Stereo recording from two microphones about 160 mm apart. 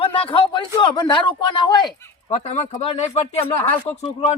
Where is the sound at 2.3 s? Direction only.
40° left (ahead or behind).